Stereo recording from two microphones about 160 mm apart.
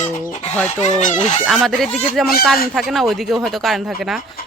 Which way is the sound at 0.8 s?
45° left (ahead or behind).